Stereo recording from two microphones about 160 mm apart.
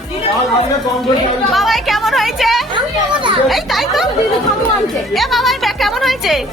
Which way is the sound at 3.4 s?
Centre (ahead or behind).